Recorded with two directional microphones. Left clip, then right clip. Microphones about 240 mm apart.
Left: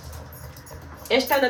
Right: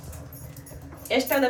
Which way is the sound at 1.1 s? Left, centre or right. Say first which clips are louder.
Left 3 dB; left.